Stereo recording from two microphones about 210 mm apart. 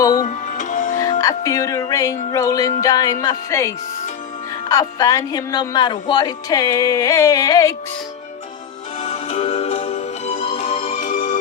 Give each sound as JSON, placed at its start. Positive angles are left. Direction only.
{"t": 0.0, "sound": "speech", "side_deg": 20}
{"t": 0.3, "sound": "music", "side_deg": 35}
{"t": 1.2, "sound": "speech", "side_deg": 15}
{"t": 9.0, "sound": "music", "side_deg": 30}
{"t": 10.9, "sound": "music", "side_deg": 40}